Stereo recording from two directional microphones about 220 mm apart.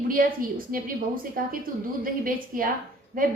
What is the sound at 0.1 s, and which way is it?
A woman's voice, 40° right (ahead or behind).